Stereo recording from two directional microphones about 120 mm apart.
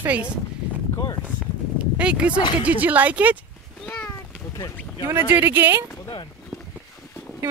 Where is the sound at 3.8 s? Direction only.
10° left (ahead or behind).